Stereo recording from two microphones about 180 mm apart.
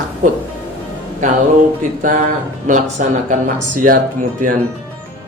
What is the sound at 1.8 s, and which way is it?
Speech, 50° right (ahead or behind).